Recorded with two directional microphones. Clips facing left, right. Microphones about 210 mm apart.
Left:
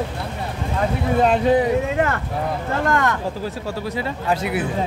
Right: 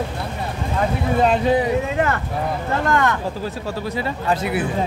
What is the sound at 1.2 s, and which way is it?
Speech, 55° left (ahead or behind).